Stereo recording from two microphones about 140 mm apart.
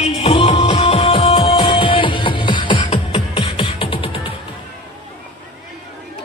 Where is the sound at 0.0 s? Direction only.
45° left (ahead or behind).